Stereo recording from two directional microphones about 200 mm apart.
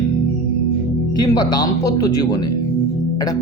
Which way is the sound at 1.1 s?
20° left (ahead or behind).